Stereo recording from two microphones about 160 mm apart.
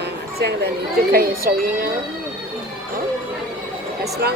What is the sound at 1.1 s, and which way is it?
Speech, 65° right (ahead or behind).